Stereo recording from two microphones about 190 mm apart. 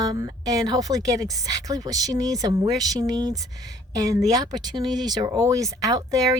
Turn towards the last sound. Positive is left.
turn(degrees=-20)  # may be behind; listen again after turning